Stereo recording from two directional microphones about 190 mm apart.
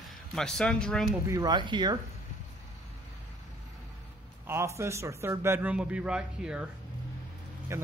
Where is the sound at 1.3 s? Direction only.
20° right (ahead or behind).